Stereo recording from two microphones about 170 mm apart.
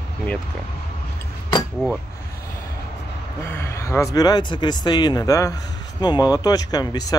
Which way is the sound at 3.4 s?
15° left (ahead or behind).